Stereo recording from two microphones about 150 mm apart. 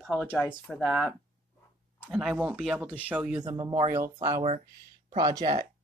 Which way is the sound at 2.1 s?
5° right (ahead or behind).